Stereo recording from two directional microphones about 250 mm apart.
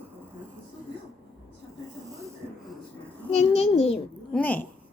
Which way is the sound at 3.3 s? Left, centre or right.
Left.